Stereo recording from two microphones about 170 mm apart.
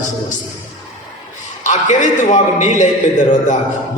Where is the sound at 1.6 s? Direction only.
45° left (ahead or behind).